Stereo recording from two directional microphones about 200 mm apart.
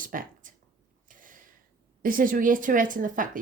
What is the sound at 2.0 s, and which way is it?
Speech, 45° right (ahead or behind).